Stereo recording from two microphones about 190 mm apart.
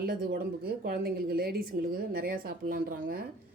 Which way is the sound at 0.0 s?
50° right (ahead or behind).